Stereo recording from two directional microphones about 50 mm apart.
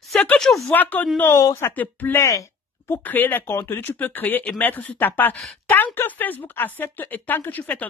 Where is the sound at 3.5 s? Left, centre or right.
Left.